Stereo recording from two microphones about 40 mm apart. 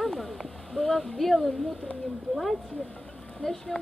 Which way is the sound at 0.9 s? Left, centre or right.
Centre.